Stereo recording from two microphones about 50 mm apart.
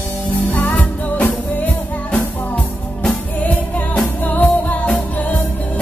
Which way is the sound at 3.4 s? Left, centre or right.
Left.